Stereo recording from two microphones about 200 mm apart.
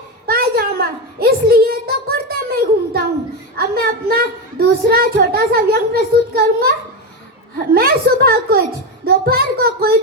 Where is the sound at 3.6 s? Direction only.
50° right (ahead or behind).